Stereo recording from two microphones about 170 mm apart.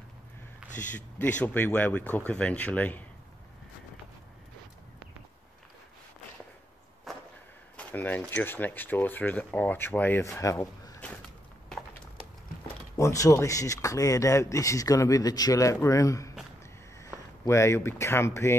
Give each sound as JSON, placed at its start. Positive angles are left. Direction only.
{"t": 0.9, "sound": "speech", "side_deg": 10}
{"t": 7.1, "sound": "whip", "side_deg": 0}
{"t": 7.7, "sound": "speech", "side_deg": 10}
{"t": 12.9, "sound": "speech", "side_deg": 20}